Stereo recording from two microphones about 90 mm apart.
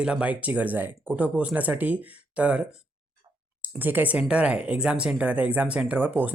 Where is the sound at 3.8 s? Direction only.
20° right (ahead or behind).